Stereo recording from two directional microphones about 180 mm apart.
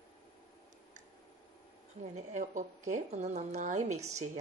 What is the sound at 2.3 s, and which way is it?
Speech, 40° right (ahead or behind).